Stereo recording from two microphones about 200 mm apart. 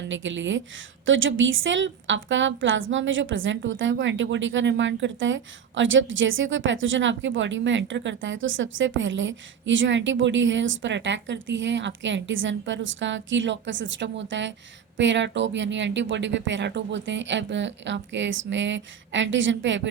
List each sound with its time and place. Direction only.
0.1 s a woman's voice: 70° right (ahead or behind)